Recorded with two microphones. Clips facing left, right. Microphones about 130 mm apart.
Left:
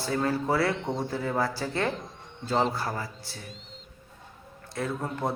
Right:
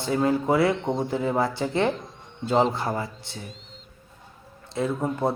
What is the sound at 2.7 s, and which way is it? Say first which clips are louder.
Speech: right 4 dB; 25° right (ahead or behind).